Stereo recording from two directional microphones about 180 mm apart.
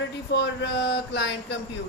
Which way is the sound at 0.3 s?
75° left (ahead or behind).